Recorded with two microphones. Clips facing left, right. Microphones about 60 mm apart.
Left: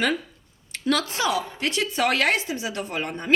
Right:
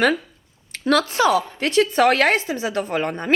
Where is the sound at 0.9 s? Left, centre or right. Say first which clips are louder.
Right 6 dB; right.